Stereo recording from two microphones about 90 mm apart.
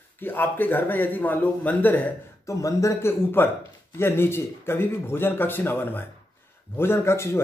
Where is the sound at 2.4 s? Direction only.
35° left (ahead or behind).